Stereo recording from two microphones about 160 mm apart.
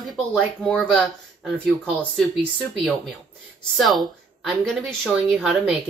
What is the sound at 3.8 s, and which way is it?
A woman's voice, centre (ahead or behind).